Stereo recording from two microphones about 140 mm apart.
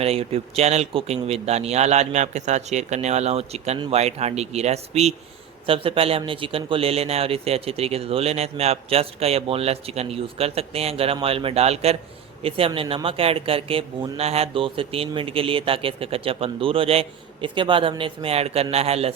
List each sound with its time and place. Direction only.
0.0 s a man's voice: 45° right (ahead or behind)